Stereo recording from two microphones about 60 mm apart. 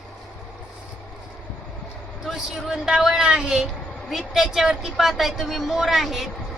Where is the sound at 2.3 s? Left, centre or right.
Centre.